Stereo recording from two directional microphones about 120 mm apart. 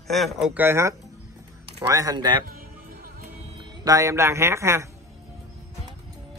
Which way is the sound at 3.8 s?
30° right (ahead or behind).